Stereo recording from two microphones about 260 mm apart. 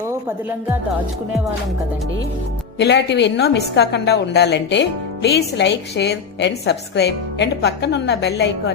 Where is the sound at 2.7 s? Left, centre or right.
Left.